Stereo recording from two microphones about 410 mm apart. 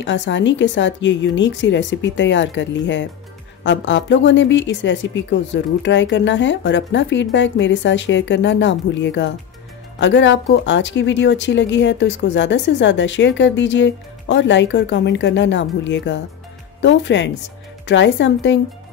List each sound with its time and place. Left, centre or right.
0.0 s speech: left